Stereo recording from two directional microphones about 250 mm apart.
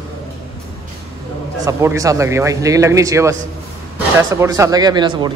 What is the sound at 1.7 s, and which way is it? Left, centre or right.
A man's voice, centre.